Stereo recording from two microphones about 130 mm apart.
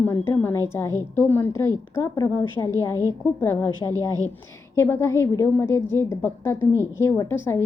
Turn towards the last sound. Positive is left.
turn(degrees=20)  # may be behind; listen again after turning